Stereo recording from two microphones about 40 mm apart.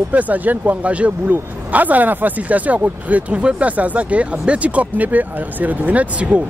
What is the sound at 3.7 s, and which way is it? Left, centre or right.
Speech, right.